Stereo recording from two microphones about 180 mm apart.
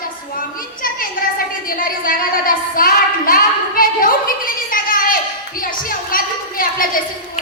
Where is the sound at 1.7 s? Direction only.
50° left (ahead or behind).